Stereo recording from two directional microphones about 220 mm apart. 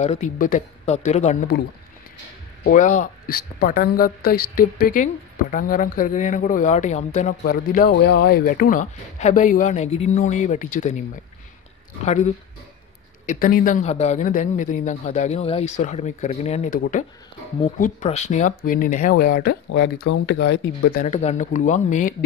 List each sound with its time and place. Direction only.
0.0 s a woman's voice: 30° left (ahead or behind)
2.6 s a woman's voice: 35° left (ahead or behind)
13.3 s a woman's voice: 40° left (ahead or behind)
21.0 s a woman's voice: 30° left (ahead or behind)